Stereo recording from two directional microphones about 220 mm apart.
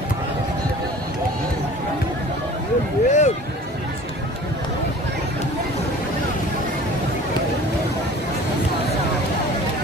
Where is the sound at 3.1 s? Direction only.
30° left (ahead or behind).